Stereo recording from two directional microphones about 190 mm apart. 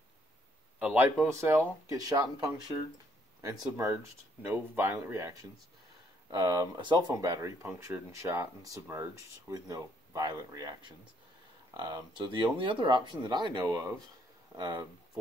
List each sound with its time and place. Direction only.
0.7 s a man's voice: 10° right (ahead or behind)